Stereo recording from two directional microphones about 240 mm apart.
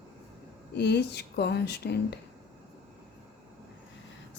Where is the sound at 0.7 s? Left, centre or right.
Left.